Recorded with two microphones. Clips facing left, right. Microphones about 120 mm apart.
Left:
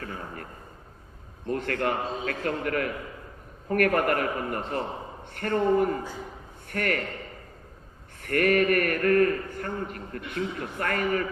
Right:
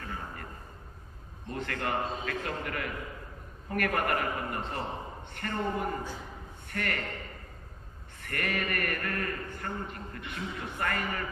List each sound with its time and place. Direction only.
1.5 s a man's voice: 50° left (ahead or behind)
8.2 s a man's voice: 50° left (ahead or behind)